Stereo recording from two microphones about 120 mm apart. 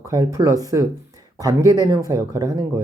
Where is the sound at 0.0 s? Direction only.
25° right (ahead or behind).